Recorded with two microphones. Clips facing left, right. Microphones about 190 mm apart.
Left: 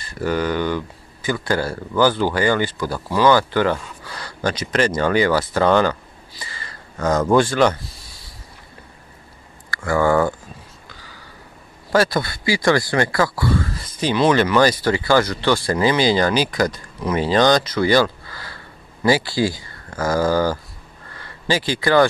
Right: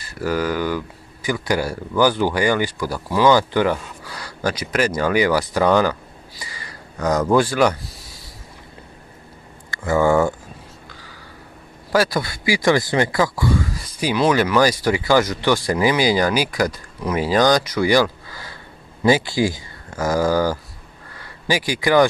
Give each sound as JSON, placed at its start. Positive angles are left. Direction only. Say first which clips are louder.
{"t": 0.0, "sound": "speech", "louder": "even", "side_deg": -5}
{"t": 6.4, "sound": "a sound", "louder": "even", "side_deg": -15}
{"t": 7.2, "sound": "speech", "louder": "left 1 dB", "side_deg": -5}
{"t": 9.7, "sound": "speech", "louder": "right 1 dB", "side_deg": -15}
{"t": 11.9, "sound": "speech", "louder": "left 1 dB", "side_deg": -10}